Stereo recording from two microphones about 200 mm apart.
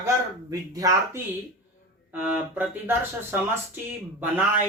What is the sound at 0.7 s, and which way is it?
Speech, 15° right (ahead or behind).